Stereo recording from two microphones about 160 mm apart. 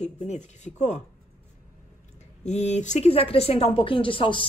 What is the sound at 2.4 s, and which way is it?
Speech, 45° left (ahead or behind).